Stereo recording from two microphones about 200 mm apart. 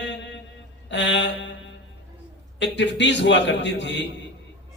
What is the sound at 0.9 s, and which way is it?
Mantra, 65° left (ahead or behind).